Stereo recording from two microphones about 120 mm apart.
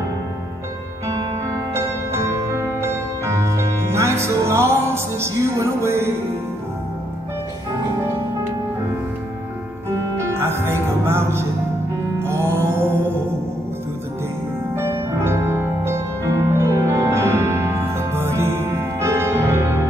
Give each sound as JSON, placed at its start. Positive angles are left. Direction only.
{"t": 1.7, "sound": "music", "side_deg": -25}
{"t": 9.8, "sound": "music", "side_deg": -20}
{"t": 14.8, "sound": "music", "side_deg": -20}